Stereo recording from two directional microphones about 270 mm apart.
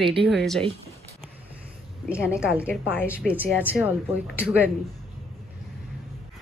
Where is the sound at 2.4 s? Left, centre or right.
Centre.